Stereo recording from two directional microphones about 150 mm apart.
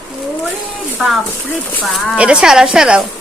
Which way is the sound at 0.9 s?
Centre (ahead or behind).